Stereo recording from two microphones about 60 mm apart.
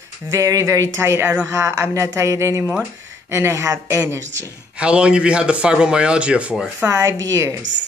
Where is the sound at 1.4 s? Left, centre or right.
Right.